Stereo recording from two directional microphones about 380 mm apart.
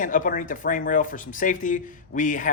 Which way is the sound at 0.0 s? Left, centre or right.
Left.